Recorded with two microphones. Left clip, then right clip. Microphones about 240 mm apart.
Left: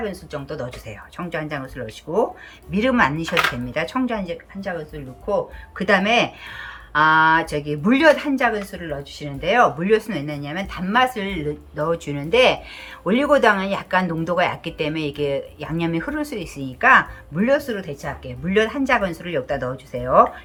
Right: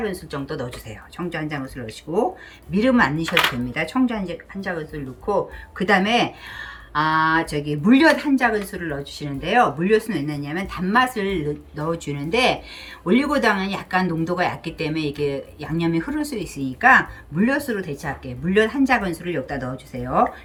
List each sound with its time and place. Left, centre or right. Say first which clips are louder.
0.0 s speech: right 1 dB; centre